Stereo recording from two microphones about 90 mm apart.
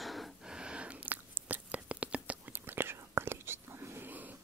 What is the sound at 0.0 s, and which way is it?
Biting, centre (ahead or behind).